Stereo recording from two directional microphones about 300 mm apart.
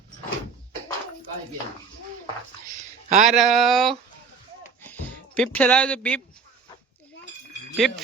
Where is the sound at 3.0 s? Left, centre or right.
Right.